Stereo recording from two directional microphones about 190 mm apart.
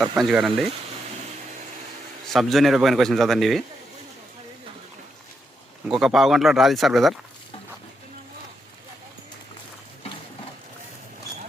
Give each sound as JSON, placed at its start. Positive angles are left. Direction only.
{"t": 0.2, "sound": "a man's voice", "side_deg": 0}
{"t": 2.2, "sound": "a man's voice", "side_deg": 0}
{"t": 5.9, "sound": "a man's voice", "side_deg": 0}